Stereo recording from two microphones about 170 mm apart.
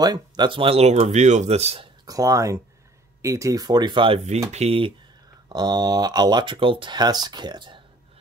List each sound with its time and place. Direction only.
0.0 s speech: 25° right (ahead or behind)
2.0 s speech: 20° right (ahead or behind)